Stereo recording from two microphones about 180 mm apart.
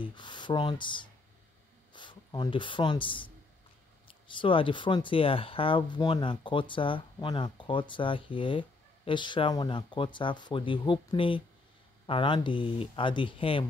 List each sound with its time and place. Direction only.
0.0 s speech: 25° left (ahead or behind)
4.4 s speech: 30° left (ahead or behind)